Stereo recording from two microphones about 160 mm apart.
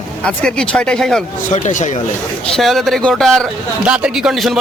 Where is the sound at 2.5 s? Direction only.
Centre (ahead or behind).